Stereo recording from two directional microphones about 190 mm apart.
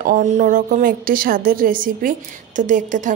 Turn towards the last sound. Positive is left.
turn(degrees=-40)  # may be behind; listen again after turning